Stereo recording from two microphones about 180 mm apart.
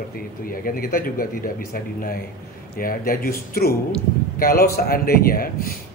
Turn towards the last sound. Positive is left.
turn(degrees=55)  # may be behind; listen again after turning